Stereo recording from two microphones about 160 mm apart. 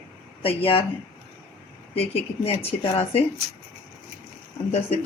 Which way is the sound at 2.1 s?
35° left (ahead or behind).